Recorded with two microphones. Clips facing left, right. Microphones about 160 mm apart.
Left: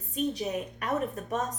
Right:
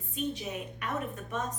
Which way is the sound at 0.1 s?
40° left (ahead or behind).